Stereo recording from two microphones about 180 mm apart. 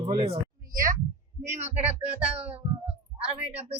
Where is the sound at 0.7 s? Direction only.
50° right (ahead or behind).